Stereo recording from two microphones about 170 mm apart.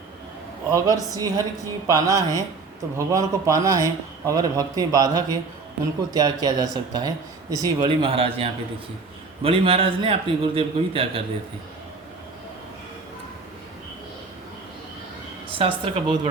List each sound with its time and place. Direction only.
0.7 s a man's voice: 20° right (ahead or behind)
15.4 s a man's voice: 30° right (ahead or behind)